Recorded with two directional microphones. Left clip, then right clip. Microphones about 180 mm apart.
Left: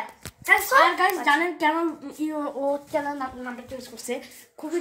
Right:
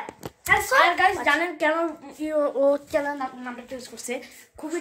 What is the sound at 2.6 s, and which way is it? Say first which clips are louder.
Speech: right 5 dB; 25° right (ahead or behind).